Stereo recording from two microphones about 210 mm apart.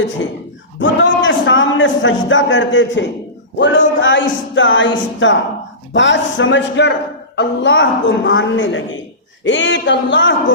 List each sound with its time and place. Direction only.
0.8 s a woman's voice: 65° left (ahead or behind)